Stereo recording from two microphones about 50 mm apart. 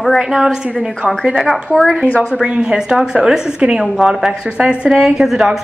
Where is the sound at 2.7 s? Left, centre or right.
Centre.